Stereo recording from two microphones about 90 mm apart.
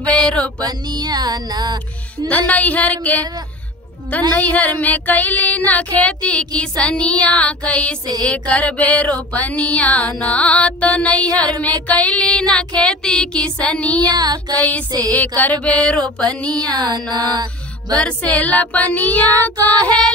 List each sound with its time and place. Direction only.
0.0 s music: 15° left (ahead or behind)
0.7 s music: 50° right (ahead or behind)
2.2 s music: 15° left (ahead or behind)
4.4 s music: 15° left (ahead or behind)
14.0 s music: 50° right (ahead or behind)
14.5 s music: 15° left (ahead or behind)
16.7 s music: 50° right (ahead or behind)
17.1 s mantra: 50° right (ahead or behind)
17.9 s music: 15° left (ahead or behind)
19.5 s music: 45° right (ahead or behind)